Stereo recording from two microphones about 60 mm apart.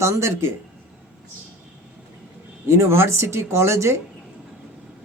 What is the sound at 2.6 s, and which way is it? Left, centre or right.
Speech, right.